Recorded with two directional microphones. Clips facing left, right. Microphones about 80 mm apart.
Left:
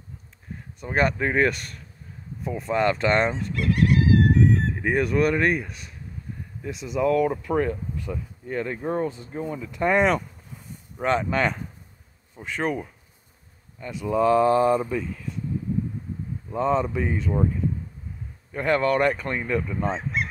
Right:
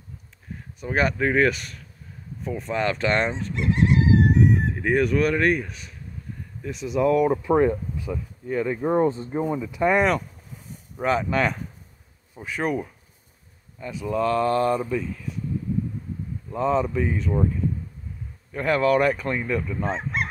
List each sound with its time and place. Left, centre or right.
0.7 s speech: centre
3.5 s chicken: right
4.7 s speech: centre
8.1 s speech: centre
8.8 s speech: right
9.3 s speech: centre
16.4 s speech: centre
18.5 s speech: centre
20.0 s speech: right